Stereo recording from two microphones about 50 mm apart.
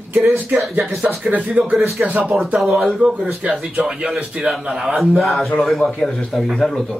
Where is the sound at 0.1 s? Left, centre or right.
Right.